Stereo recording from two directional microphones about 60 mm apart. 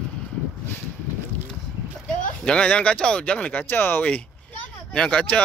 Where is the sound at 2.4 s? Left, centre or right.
Centre; by 4.0 s left.